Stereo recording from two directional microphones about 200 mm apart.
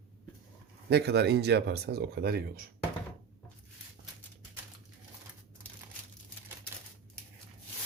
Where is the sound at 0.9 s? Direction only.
55° right (ahead or behind).